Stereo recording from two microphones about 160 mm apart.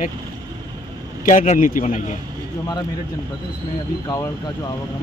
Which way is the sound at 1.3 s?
55° left (ahead or behind).